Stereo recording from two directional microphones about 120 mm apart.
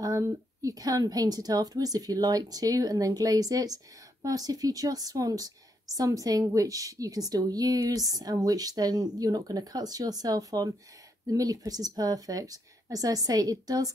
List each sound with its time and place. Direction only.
0.0 s a woman's voice: 25° right (ahead or behind)